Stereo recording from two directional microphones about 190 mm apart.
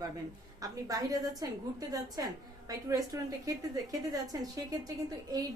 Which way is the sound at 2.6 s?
20° right (ahead or behind).